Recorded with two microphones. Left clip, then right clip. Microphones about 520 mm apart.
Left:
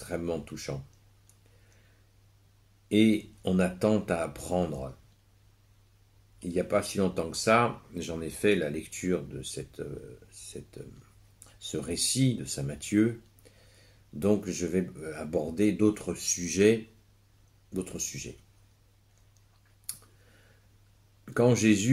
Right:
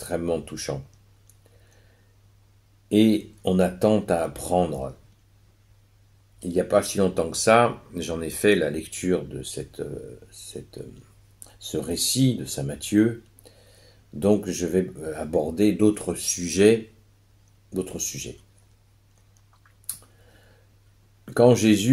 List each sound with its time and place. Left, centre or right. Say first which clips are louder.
0.0 s speech: right 7 dB; left
2.9 s speech: right 5 dB; left
6.5 s speech: right 7 dB; left
21.3 s speech: right 7 dB; left